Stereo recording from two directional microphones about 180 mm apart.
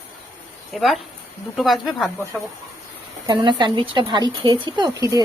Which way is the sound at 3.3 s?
25° right (ahead or behind).